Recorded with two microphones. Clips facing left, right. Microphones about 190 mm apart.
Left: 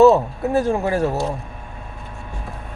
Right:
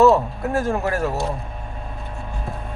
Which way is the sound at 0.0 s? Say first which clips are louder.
Left 3 dB; 20° left (ahead or behind).